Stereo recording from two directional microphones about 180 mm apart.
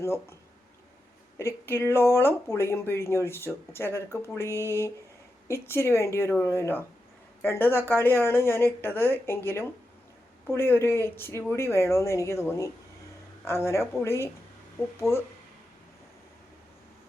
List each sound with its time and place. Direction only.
0.0 s speech: 15° left (ahead or behind)
1.4 s speech: 15° left (ahead or behind)